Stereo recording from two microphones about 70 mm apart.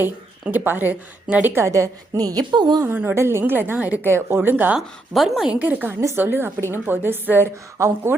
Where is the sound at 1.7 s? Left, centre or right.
Right.